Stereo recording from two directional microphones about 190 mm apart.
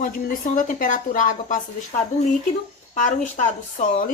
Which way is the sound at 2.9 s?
40° left (ahead or behind).